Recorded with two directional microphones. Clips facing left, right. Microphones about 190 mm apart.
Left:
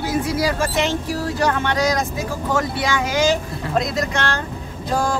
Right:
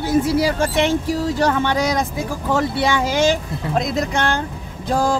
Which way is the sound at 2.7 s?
30° right (ahead or behind).